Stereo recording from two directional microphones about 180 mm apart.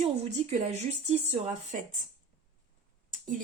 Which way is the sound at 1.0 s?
35° right (ahead or behind).